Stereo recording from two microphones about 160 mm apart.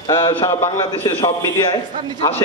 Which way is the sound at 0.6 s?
30° left (ahead or behind).